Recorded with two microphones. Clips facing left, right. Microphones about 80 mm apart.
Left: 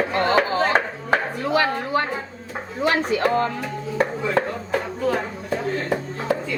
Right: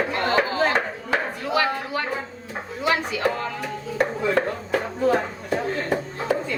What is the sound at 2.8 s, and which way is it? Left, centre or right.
Speech, left.